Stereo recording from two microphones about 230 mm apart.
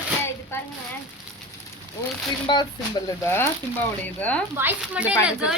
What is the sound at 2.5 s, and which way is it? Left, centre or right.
Speech, left.